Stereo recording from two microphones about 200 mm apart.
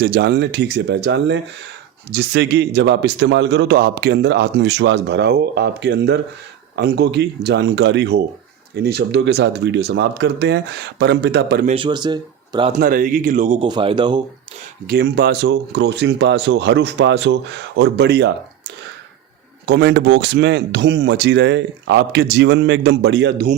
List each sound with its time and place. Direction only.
0.0 s a man's voice: 55° right (ahead or behind)
11.6 s speech: 25° right (ahead or behind)
12.8 s speech: 45° right (ahead or behind)
13.7 s speech: 25° right (ahead or behind)
14.8 s a man's voice: 55° right (ahead or behind)
19.6 s a man's voice: 55° right (ahead or behind)